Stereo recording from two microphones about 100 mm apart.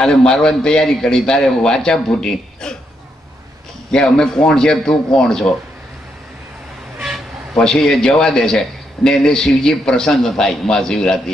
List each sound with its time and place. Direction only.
0.0 s a man's voice: 5° left (ahead or behind)
3.9 s a man's voice: 10° left (ahead or behind)
7.5 s a man's voice: 5° left (ahead or behind)